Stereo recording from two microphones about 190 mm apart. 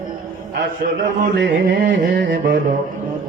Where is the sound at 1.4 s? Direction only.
75° right (ahead or behind).